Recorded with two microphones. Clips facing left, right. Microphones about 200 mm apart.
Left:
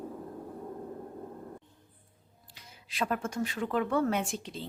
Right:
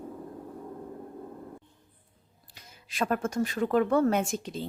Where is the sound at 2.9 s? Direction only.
45° right (ahead or behind).